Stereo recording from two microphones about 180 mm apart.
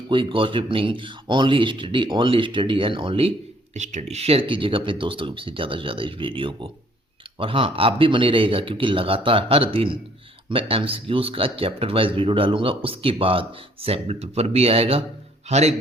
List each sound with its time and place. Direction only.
0.1 s a man's voice: 30° right (ahead or behind)